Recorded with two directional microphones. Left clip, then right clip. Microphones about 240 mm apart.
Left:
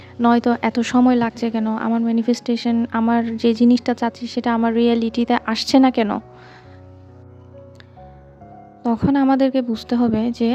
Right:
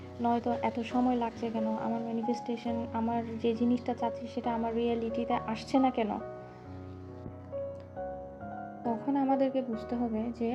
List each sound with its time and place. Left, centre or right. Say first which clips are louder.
0.2 s speech: left 13 dB; left
8.8 s a woman's voice: left 13 dB; left